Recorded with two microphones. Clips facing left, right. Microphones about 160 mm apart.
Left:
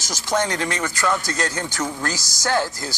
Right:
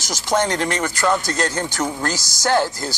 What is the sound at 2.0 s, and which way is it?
Speech, 30° right (ahead or behind).